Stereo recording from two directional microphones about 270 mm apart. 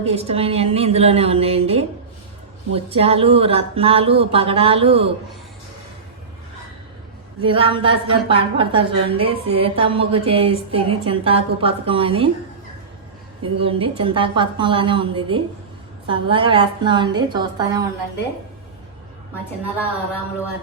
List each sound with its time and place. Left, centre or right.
0.0 s a woman's voice: right
7.4 s a woman's voice: centre
13.4 s a woman's voice: centre